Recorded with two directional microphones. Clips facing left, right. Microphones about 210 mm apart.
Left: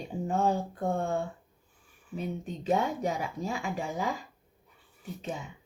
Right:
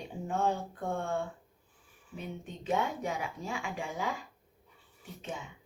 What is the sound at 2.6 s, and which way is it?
A woman's voice, 40° left (ahead or behind).